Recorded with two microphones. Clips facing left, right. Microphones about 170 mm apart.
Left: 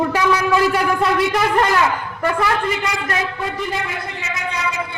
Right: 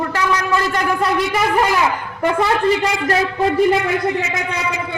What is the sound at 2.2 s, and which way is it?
Speech, 20° right (ahead or behind).